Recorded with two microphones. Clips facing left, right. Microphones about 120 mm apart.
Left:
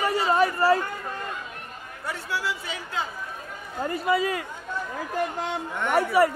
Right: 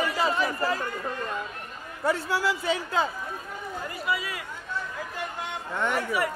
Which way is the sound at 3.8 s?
40° left (ahead or behind).